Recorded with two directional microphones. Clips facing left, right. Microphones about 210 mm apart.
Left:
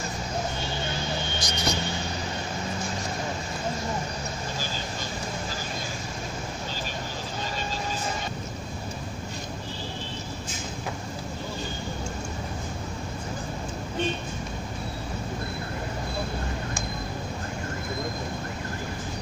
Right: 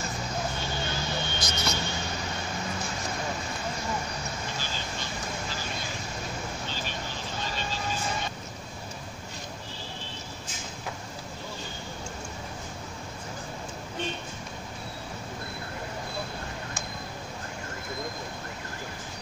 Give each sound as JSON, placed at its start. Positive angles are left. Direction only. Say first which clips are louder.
{"t": 1.4, "sound": "speech", "louder": "left 2 dB", "side_deg": 15}